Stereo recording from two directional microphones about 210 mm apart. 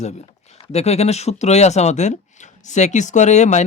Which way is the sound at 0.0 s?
30° left (ahead or behind).